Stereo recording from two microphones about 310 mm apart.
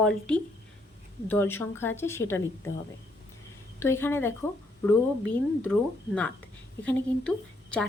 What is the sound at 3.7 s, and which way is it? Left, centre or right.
Speech, centre.